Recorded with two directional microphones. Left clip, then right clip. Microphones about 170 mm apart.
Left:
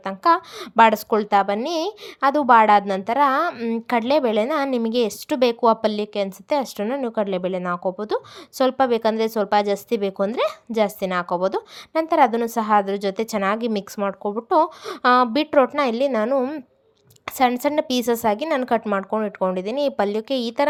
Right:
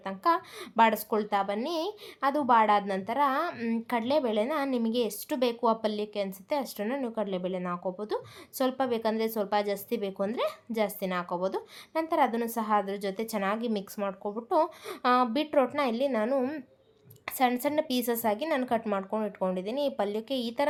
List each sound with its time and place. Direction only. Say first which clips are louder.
0.0 s a woman's voice: left 9 dB; 40° left (ahead or behind); by 16.6 s 25° left (ahead or behind)
17.2 s a woman's voice: left 8 dB; 35° left (ahead or behind)